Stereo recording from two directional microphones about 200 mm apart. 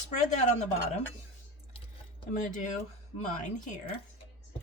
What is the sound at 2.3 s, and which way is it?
Speech, 40° left (ahead or behind).